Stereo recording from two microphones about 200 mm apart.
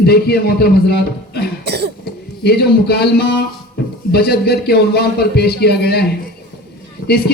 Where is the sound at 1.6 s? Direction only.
55° right (ahead or behind).